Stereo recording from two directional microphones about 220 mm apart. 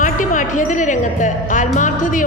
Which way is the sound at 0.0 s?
35° left (ahead or behind).